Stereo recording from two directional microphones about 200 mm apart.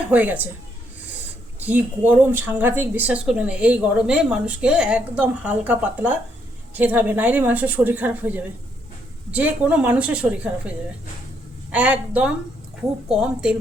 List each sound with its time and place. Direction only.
0.1 s speech: 10° right (ahead or behind)
1.5 s a woman's voice: 10° right (ahead or behind)